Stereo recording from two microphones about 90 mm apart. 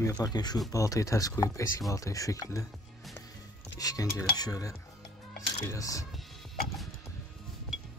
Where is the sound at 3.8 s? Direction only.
40° left (ahead or behind).